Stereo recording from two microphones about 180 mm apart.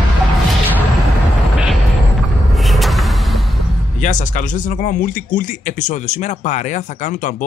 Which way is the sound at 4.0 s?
45° left (ahead or behind).